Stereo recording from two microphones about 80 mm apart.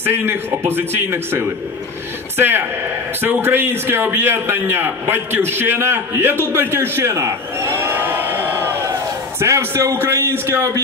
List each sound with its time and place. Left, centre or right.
0.0 s a man's voice: right
6.5 s a sound: right
9.4 s a man's voice: right